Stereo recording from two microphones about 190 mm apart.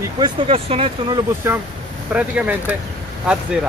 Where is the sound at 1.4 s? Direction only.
15° right (ahead or behind).